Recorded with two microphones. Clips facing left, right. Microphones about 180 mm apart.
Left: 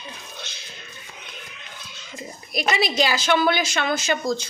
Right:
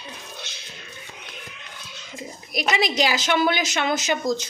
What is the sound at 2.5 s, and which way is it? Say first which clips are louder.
A woman's voice: even; 15° right (ahead or behind).